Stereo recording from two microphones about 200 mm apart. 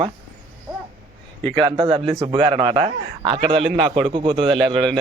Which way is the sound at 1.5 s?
25° right (ahead or behind).